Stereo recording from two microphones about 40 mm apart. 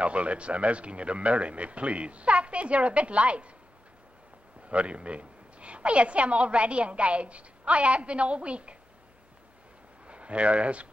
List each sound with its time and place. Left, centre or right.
0.0 s a woman's voice: right
4.6 s a woman's voice: right
10.0 s speech: right